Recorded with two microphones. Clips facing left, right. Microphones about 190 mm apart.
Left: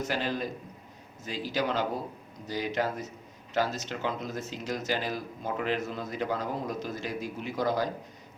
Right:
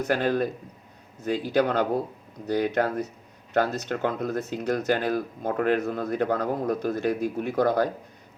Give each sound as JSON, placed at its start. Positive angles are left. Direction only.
{"t": 0.0, "sound": "speech", "side_deg": -55}